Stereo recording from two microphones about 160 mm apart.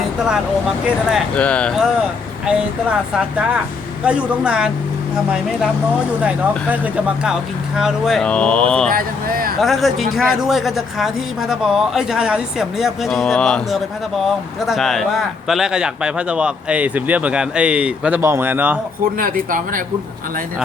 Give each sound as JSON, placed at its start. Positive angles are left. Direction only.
{"t": 1.4, "sound": "speech", "side_deg": 5}
{"t": 3.2, "sound": "speech", "side_deg": -5}
{"t": 6.2, "sound": "speech", "side_deg": -10}
{"t": 8.9, "sound": "speech", "side_deg": -65}
{"t": 9.6, "sound": "speech", "side_deg": 0}
{"t": 19.2, "sound": "speech", "side_deg": -55}